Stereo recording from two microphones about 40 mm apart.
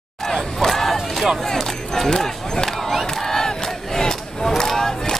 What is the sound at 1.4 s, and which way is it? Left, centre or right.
Speech, centre.